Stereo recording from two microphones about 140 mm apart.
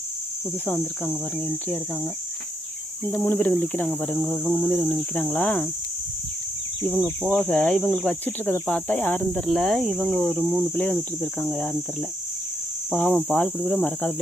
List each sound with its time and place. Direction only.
0.6 s speech: 10° left (ahead or behind)
1.1 s speech: centre (ahead or behind)
3.1 s speech: 15° left (ahead or behind)
6.8 s speech: 15° left (ahead or behind)
12.9 s speech: 10° left (ahead or behind)